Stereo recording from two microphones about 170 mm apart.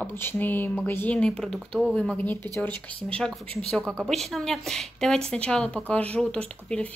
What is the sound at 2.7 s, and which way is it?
Speech, 30° right (ahead or behind).